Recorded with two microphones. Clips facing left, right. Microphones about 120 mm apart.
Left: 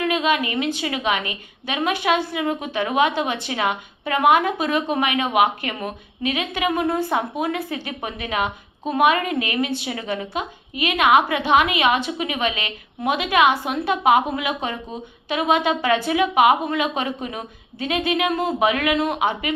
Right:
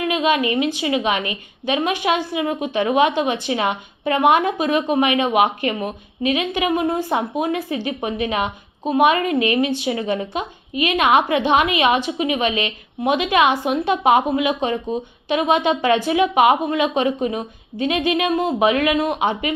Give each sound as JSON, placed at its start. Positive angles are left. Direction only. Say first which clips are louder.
{"t": 0.1, "sound": "a woman's voice", "louder": "right 3 dB", "side_deg": -20}